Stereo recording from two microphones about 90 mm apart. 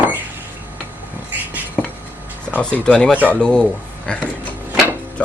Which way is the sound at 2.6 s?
10° left (ahead or behind).